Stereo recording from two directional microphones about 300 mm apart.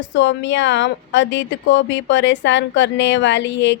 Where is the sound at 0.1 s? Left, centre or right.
Left.